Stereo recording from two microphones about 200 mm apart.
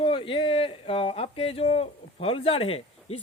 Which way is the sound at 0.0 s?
25° left (ahead or behind).